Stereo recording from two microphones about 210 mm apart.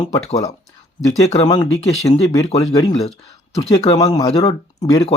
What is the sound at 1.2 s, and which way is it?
Speech, 25° left (ahead or behind).